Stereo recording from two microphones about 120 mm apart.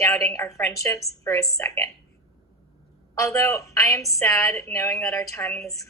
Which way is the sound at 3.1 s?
25° left (ahead or behind).